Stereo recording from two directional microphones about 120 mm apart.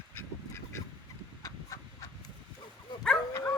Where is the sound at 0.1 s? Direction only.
20° left (ahead or behind).